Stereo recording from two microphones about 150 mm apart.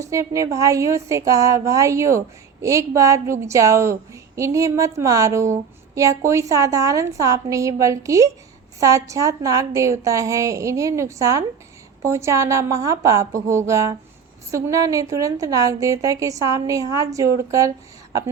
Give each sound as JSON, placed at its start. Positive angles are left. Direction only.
{"t": 0.0, "sound": "a woman's voice", "side_deg": -20}